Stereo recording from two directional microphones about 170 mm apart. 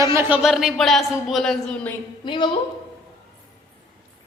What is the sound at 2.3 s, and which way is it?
Speech, 30° left (ahead or behind).